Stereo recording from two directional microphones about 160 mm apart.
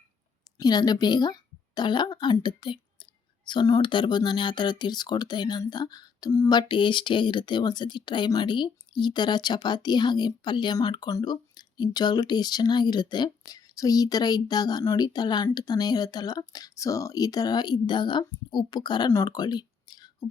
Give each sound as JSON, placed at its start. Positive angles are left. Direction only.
{"t": 0.6, "sound": "speech", "side_deg": 25}